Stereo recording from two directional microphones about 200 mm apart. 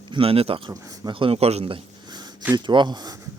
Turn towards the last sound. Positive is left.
turn(degrees=-20)  # may be behind; listen again after turning